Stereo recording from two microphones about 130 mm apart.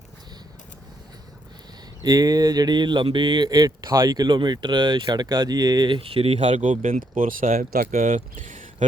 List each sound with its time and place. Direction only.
2.0 s speech: 30° right (ahead or behind); by 6.6 s 45° right (ahead or behind)
6.6 s speech: 75° right (ahead or behind)
7.2 s speech: 90° right